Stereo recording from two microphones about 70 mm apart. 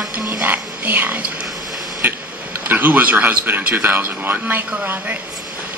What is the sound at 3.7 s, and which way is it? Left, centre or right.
Speech, right.